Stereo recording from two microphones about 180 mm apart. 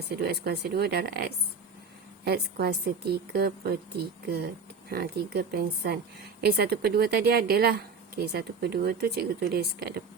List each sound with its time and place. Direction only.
0.1 s a woman's voice: 65° right (ahead or behind)